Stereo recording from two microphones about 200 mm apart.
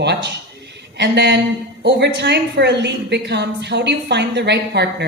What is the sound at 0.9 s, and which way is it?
Speech, 60° right (ahead or behind).